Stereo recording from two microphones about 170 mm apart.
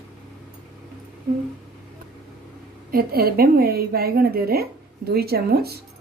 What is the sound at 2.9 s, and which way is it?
A woman's voice, 60° right (ahead or behind).